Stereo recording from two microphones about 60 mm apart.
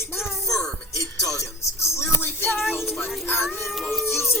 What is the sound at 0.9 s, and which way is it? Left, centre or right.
Music, left.